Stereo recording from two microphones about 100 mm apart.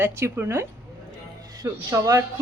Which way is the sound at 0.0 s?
25° right (ahead or behind).